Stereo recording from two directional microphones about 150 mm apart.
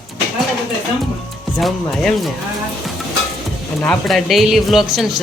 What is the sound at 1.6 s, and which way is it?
Speech, centre (ahead or behind).